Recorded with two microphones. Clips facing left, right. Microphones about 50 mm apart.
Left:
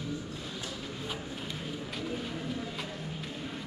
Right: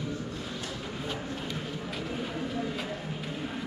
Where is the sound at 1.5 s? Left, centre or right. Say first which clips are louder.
Right 3 dB; centre.